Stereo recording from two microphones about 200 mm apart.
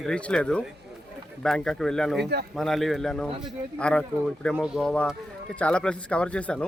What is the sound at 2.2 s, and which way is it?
Speech, 55° right (ahead or behind).